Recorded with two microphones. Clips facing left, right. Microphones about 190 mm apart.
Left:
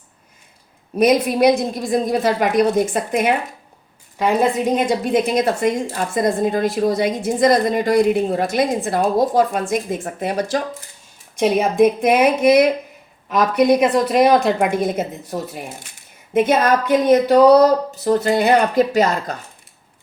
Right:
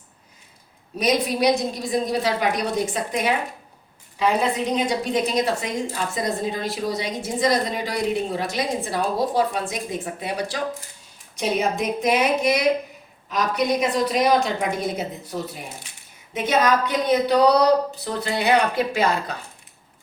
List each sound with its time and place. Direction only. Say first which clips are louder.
0.9 s a woman's voice: left 6 dB; 55° left (ahead or behind)